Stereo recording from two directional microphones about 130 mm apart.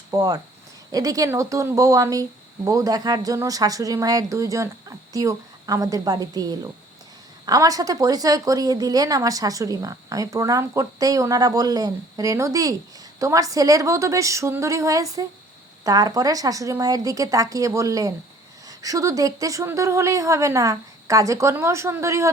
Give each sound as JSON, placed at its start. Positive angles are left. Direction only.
{"t": 0.1, "sound": "a woman's voice", "side_deg": -25}